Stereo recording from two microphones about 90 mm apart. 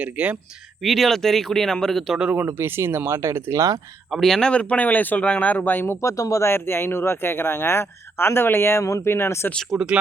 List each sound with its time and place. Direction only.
0.0 s speech: 15° right (ahead or behind)
0.8 s speech: centre (ahead or behind)
2.5 s speech: 25° right (ahead or behind)
4.1 s speech: 5° left (ahead or behind); by 9.5 s 30° left (ahead or behind)
9.7 s speech: 10° right (ahead or behind)